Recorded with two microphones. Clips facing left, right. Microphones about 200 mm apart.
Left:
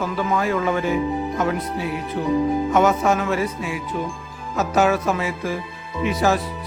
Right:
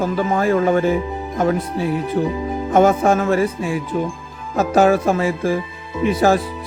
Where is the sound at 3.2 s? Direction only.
50° right (ahead or behind).